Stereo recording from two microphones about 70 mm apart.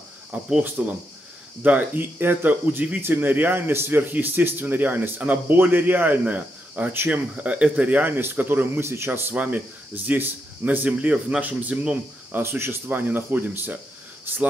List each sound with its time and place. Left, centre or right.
0.6 s a man's voice: right
9.3 s speech: right
12.3 s speech: right